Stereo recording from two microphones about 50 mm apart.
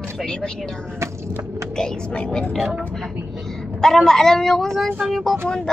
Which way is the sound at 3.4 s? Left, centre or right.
Centre.